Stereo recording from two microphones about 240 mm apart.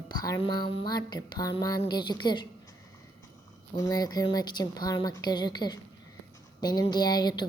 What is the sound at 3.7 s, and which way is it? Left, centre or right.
Speech, centre.